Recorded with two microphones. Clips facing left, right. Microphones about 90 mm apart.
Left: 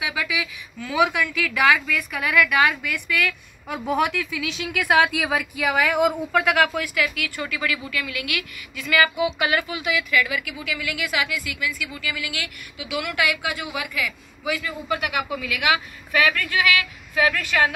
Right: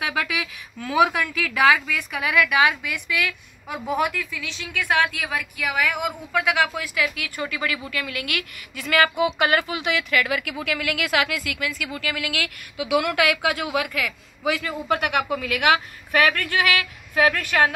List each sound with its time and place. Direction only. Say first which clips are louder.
0.0 s a woman's voice: right 1 dB; 50° right (ahead or behind); by 5.9 s 15° left (ahead or behind)
6.4 s a woman's voice: left 1 dB; 10° right (ahead or behind)
7.0 s a woman's voice: right 2 dB; 25° right (ahead or behind); by 14.6 s 65° right (ahead or behind)
14.9 s a woman's voice: right 3 dB; 50° right (ahead or behind)